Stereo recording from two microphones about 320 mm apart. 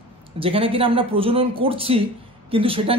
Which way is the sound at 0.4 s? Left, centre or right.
Centre.